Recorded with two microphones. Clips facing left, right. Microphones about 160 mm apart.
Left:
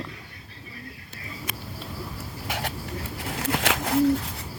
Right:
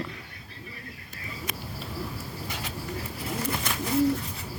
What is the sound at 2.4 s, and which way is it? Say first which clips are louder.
Bird: left 8 dB; 90° left.